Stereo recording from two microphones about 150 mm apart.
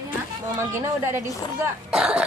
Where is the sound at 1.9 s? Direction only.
5° right (ahead or behind).